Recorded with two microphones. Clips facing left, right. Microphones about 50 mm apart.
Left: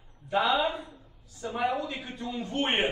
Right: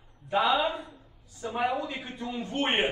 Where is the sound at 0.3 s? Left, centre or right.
Centre.